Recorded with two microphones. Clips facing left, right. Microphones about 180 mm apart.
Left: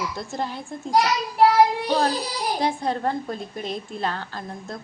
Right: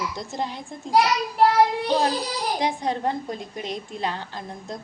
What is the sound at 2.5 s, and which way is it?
A woman's voice, 15° right (ahead or behind).